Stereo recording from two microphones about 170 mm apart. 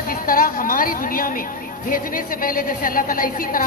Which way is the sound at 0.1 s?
55° left (ahead or behind).